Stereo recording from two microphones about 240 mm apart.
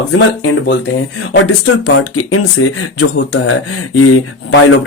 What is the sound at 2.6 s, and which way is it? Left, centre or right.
Speech, left.